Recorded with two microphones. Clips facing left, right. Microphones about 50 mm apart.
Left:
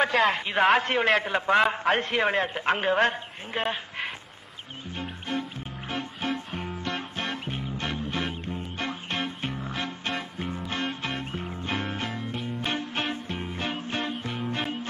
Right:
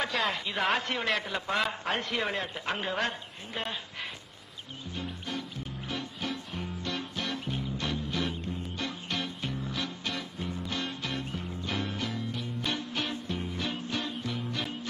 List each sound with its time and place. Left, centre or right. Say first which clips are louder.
0.3 s a man's voice: left 7 dB; left
5.3 s music: left 9 dB; left